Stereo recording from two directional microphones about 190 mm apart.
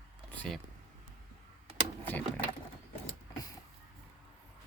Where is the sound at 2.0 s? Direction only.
10° left (ahead or behind).